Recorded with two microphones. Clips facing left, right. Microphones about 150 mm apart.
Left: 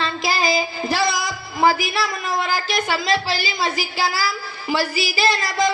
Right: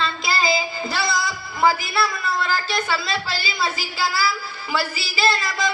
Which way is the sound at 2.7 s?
20° left (ahead or behind).